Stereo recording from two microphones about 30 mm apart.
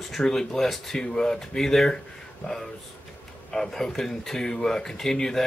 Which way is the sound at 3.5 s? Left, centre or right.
Centre.